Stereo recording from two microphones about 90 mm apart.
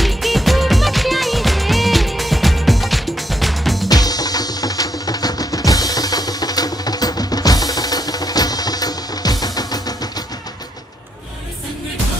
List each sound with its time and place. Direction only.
0.0 s music: centre (ahead or behind)
3.9 s music: 45° left (ahead or behind)